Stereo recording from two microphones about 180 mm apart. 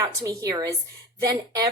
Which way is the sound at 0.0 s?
20° right (ahead or behind).